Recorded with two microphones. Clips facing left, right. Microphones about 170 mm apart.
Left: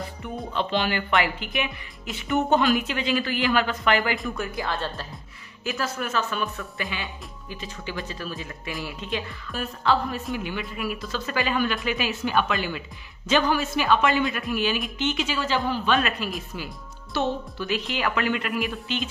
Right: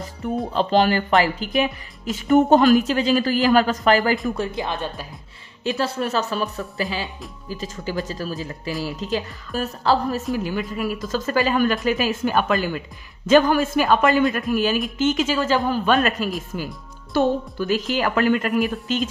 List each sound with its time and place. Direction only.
0.5 s speech: 40° right (ahead or behind)
4.4 s speech: 25° right (ahead or behind)
5.6 s speech: 30° right (ahead or behind)